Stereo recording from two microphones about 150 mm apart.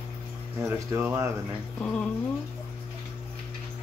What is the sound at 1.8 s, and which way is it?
Speech, 5° left (ahead or behind).